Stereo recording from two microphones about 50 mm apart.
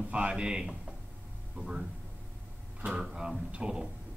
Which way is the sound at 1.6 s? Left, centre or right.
Right.